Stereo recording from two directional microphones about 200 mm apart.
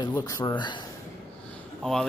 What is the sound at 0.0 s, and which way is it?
Speech, 15° left (ahead or behind).